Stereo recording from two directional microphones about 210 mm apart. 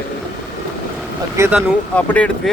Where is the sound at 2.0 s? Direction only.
5° left (ahead or behind).